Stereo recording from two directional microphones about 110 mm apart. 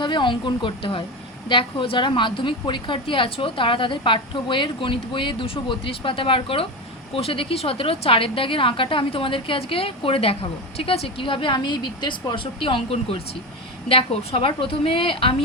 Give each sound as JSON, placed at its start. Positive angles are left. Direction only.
{"t": 0.0, "sound": "a woman's voice", "side_deg": 45}